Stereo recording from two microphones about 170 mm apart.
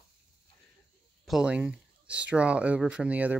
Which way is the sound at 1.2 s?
5° right (ahead or behind).